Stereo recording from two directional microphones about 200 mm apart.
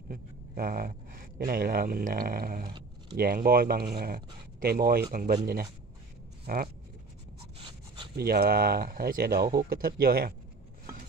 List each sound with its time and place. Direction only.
0.1 s speech: 45° right (ahead or behind)
2.6 s a sound: 20° right (ahead or behind)
3.2 s speech: 50° right (ahead or behind)
8.2 s speech: 50° right (ahead or behind)